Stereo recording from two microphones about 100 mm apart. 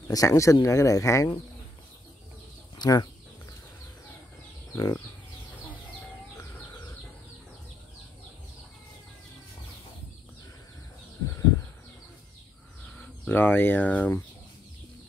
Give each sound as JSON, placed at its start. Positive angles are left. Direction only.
{"t": 0.1, "sound": "speech", "side_deg": 35}
{"t": 2.8, "sound": "speech", "side_deg": 45}
{"t": 4.7, "sound": "speech", "side_deg": 35}
{"t": 13.3, "sound": "speech", "side_deg": 20}